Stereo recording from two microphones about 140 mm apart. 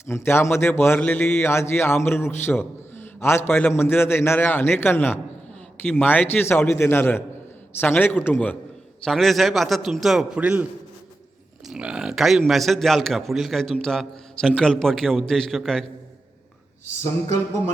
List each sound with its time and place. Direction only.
0.1 s a man's voice: 20° left (ahead or behind)
9.0 s a man's voice: centre (ahead or behind)
11.7 s a man's voice: 5° right (ahead or behind)